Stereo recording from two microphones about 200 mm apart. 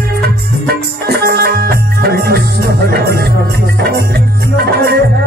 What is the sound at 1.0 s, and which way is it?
Music, 55° right (ahead or behind).